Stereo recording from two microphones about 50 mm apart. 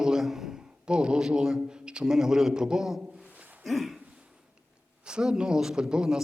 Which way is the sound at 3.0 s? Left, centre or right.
Right.